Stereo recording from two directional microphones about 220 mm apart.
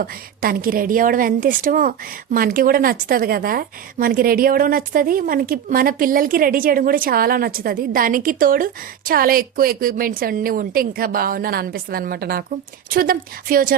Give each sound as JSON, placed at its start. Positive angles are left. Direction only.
{"t": 0.0, "sound": "a woman's voice", "side_deg": -40}